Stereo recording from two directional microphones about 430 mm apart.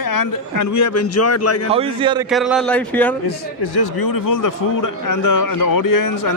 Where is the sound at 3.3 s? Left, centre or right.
Left.